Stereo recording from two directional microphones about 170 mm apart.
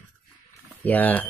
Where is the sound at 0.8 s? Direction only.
10° left (ahead or behind).